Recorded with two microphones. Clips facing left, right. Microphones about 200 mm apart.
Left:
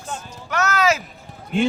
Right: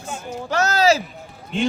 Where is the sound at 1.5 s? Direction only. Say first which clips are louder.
Left 2 dB; 5° left (ahead or behind).